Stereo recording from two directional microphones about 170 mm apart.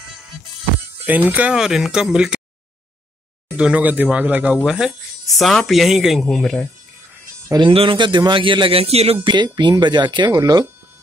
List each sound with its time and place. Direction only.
1.0 s speech: 10° right (ahead or behind)
3.4 s speech: 5° right (ahead or behind)
7.4 s a man's voice: 25° right (ahead or behind)